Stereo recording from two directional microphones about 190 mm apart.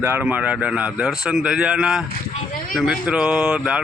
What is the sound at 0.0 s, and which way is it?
A man's voice, 10° right (ahead or behind).